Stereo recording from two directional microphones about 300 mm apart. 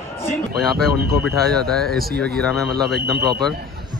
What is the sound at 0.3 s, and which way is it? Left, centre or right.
Speech, centre.